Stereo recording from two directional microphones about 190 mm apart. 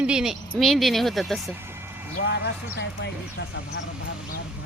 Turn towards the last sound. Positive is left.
turn(degrees=65)  # may be behind; listen again after turning